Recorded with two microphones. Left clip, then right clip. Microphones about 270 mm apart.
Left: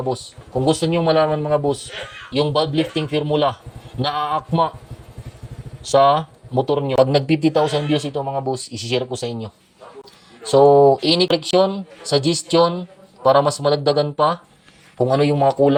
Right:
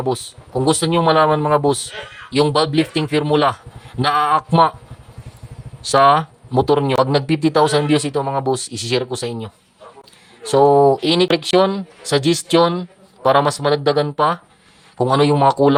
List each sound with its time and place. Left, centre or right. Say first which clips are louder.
0.1 s speech: right 2 dB; right
5.8 s speech: right 2 dB; right
6.9 s speech: left 1 dB; centre